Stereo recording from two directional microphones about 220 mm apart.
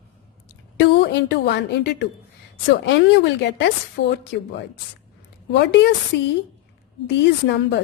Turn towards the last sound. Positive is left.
turn(degrees=50)  # may be behind; listen again after turning